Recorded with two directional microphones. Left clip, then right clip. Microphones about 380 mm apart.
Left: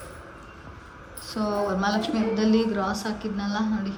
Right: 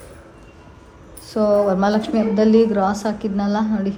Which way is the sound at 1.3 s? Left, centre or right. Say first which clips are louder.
Right 10 dB; centre.